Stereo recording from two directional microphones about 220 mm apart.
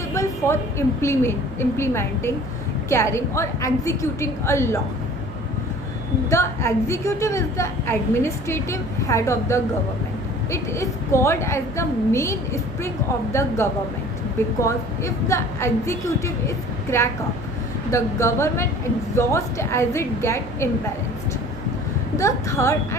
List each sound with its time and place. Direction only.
0.1 s a woman's voice: 10° left (ahead or behind)
6.3 s a woman's voice: 10° left (ahead or behind)
14.6 s a woman's voice: 15° left (ahead or behind)
22.2 s a woman's voice: 15° left (ahead or behind)